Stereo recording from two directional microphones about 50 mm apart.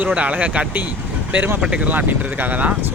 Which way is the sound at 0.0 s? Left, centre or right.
Right.